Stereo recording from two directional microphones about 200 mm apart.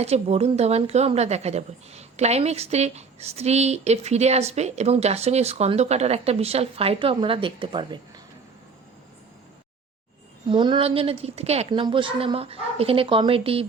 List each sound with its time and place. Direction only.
0.0 s a woman's voice: 30° right (ahead or behind)
10.5 s a woman's voice: 25° right (ahead or behind)